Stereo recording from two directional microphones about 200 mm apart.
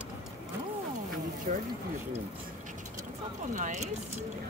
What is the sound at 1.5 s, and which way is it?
Speech, 35° right (ahead or behind).